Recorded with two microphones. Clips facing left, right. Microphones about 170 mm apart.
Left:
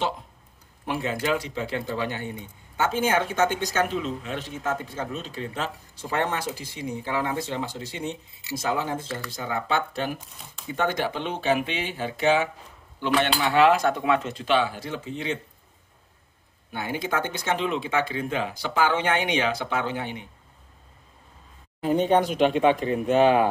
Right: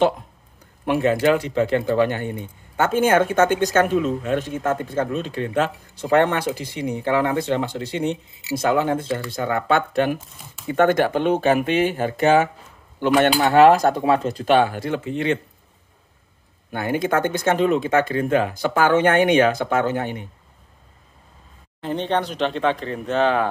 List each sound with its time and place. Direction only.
0.8 s speech: 60° right (ahead or behind)
16.7 s speech: 55° right (ahead or behind)
21.8 s speech: 10° left (ahead or behind)